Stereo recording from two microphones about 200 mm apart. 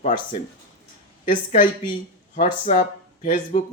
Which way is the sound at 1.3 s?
40° left (ahead or behind).